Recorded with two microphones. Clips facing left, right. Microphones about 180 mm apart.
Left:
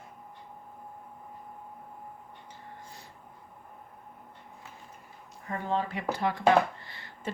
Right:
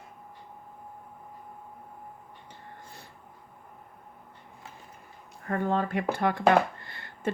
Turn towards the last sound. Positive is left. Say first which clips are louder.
# right 5 dB
turn(degrees=-55)  # may be behind; listen again after turning